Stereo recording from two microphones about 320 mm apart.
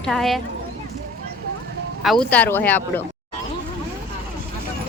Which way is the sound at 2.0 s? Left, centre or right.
Centre.